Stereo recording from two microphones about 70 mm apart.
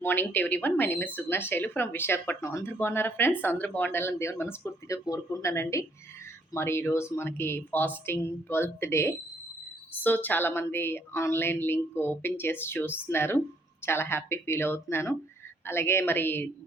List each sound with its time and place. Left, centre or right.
0.0 s a woman's voice: left
4.9 s a woman's voice: left
9.9 s a woman's voice: left